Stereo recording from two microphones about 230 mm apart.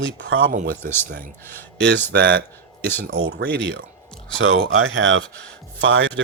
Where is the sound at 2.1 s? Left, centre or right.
Right.